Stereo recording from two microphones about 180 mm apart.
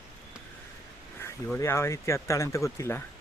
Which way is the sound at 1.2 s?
15° left (ahead or behind).